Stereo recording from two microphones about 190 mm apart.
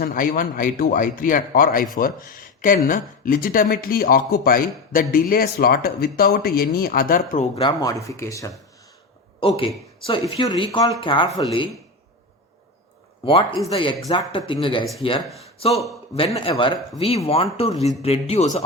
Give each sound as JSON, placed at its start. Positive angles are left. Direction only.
{"t": 0.0, "sound": "speech", "side_deg": 50}
{"t": 7.5, "sound": "speech", "side_deg": 20}
{"t": 9.4, "sound": "speech", "side_deg": 30}
{"t": 13.2, "sound": "a man's voice", "side_deg": 25}